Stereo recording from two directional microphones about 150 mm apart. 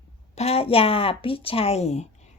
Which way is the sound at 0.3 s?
40° left (ahead or behind).